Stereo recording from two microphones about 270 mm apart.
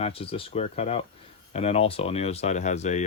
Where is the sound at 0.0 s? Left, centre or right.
Left.